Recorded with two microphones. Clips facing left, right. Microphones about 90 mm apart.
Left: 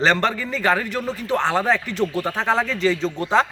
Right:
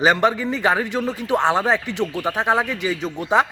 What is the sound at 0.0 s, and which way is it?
Speech, 15° right (ahead or behind).